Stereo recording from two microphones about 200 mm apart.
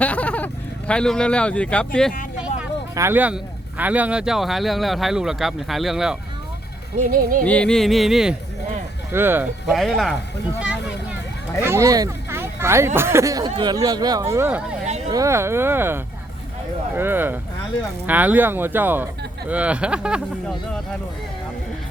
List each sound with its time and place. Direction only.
0.0 s speech: 5° left (ahead or behind)
2.9 s speech: 10° right (ahead or behind)
7.0 s speech: 40° right (ahead or behind)
7.4 s speech: 5° left (ahead or behind)
10.6 s a sound: 5° right (ahead or behind)
11.6 s speech: 15° right (ahead or behind)
14.8 s a sound: 35° right (ahead or behind)
15.1 s speech: 15° right (ahead or behind)